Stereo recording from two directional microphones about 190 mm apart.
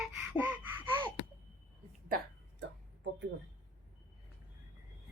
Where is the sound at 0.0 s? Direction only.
5° right (ahead or behind).